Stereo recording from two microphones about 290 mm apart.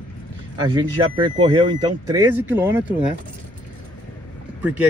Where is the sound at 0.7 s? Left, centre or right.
Centre.